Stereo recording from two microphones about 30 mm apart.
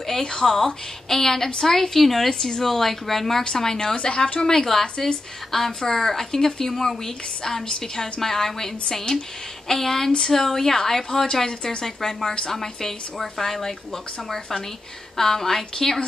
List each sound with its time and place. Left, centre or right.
0.2 s speech: left
1.0 s a woman's voice: centre
3.9 s speech: left
4.4 s a woman's voice: centre
11.4 s speech: left
11.8 s a woman's voice: centre
15.1 s a woman's voice: centre